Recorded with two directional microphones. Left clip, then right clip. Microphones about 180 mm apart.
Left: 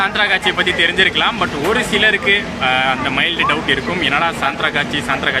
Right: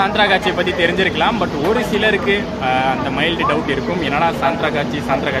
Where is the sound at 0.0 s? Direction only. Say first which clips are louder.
Even; 5° right (ahead or behind).